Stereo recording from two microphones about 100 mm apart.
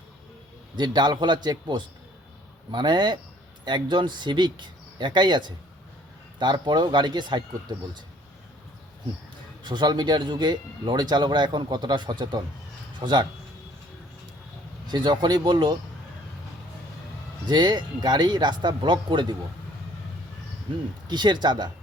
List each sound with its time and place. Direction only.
0.8 s a man's voice: 45° right (ahead or behind)
9.6 s a man's voice: 45° right (ahead or behind)
14.8 s a man's voice: 45° right (ahead or behind)
17.5 s a man's voice: 45° right (ahead or behind)
21.1 s a man's voice: 45° right (ahead or behind)